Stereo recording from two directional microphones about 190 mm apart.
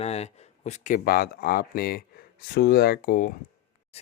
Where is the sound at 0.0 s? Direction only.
35° left (ahead or behind); by 3.3 s 60° left (ahead or behind).